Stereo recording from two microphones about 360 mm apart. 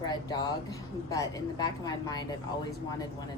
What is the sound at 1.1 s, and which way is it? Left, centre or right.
A woman's voice, centre.